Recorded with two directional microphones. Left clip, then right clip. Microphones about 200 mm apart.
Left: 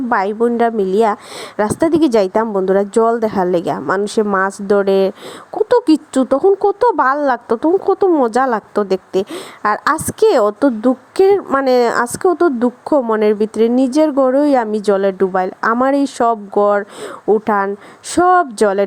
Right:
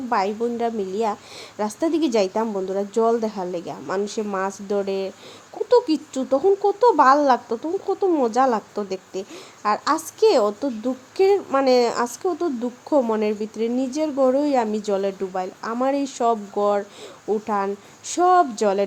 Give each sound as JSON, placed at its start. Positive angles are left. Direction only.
{"t": 0.1, "sound": "speech", "side_deg": 35}